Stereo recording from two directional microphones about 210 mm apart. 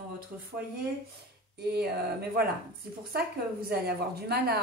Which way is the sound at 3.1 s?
45° right (ahead or behind).